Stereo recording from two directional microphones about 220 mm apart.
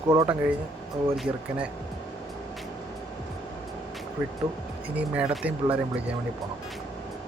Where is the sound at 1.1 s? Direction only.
Centre (ahead or behind).